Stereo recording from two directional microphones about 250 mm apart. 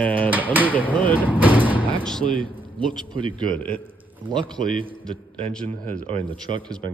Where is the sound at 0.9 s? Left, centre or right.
Centre.